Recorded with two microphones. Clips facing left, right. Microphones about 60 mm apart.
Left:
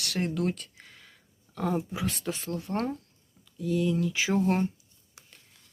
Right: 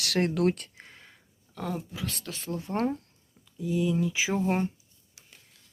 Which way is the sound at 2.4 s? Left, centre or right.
Centre.